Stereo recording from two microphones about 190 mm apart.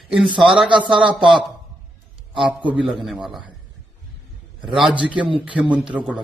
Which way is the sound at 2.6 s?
5° right (ahead or behind).